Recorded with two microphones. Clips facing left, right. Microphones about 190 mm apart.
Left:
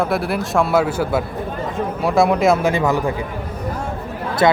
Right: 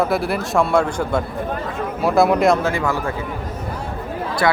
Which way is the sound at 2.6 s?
20° left (ahead or behind).